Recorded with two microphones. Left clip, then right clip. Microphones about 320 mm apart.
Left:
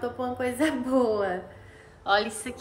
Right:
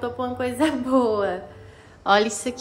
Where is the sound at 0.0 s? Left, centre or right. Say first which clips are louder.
Right 3 dB; centre.